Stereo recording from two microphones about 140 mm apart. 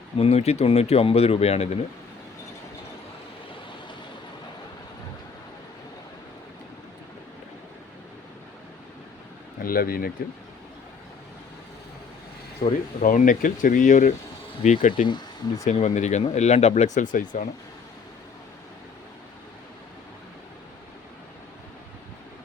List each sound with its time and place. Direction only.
0.2 s speech: 45° left (ahead or behind)
9.6 s speech: 90° left
12.6 s speech: 40° left (ahead or behind)
13.0 s speech: 70° left (ahead or behind)
15.0 s speech: 30° left (ahead or behind)
15.6 s speech: 55° left (ahead or behind)